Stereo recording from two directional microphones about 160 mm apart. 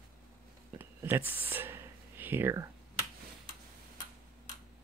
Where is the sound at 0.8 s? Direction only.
15° right (ahead or behind).